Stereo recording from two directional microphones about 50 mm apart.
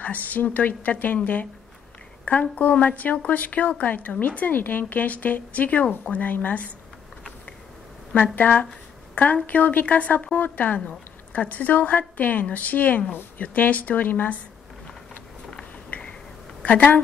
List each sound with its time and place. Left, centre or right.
0.0 s a woman's voice: left
8.1 s a woman's voice: left
15.9 s a sound: left
16.6 s a woman's voice: left